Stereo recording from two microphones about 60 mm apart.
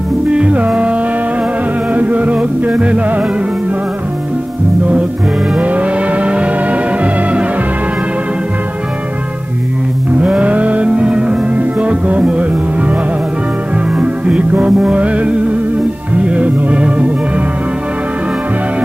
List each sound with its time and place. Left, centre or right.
0.3 s music: centre
2.0 s music: right
5.6 s music: right
10.2 s music: centre
13.9 s music: centre